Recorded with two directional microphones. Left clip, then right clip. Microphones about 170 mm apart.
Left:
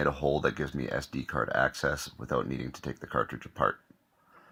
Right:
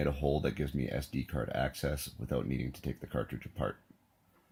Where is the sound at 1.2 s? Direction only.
5° left (ahead or behind).